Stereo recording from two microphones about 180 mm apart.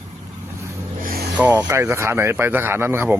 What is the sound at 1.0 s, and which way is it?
Vehicle, 55° right (ahead or behind).